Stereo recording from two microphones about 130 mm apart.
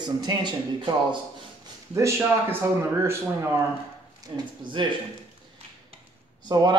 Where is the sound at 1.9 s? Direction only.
20° right (ahead or behind).